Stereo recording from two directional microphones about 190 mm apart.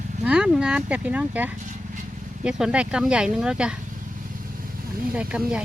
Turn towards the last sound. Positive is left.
turn(degrees=-5)  # may be behind; listen again after turning